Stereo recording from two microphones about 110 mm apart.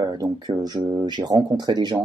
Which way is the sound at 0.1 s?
35° right (ahead or behind).